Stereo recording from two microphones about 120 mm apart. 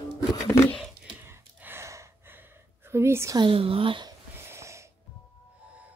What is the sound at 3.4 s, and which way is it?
Speech, 50° right (ahead or behind).